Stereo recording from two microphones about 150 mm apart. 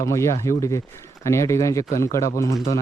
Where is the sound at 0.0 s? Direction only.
20° left (ahead or behind).